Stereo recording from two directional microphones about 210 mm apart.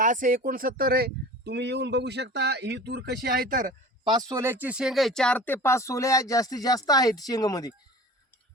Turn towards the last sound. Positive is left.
turn(degrees=20)  # may be behind; listen again after turning